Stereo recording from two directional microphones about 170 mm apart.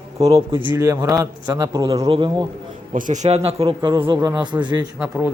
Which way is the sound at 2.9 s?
50° right (ahead or behind).